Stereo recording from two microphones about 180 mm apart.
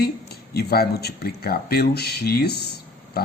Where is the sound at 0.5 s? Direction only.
60° left (ahead or behind).